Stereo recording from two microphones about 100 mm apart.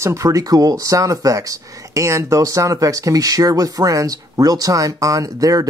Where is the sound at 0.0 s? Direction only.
30° right (ahead or behind).